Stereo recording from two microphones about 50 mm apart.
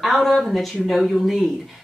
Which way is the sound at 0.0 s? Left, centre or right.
Centre.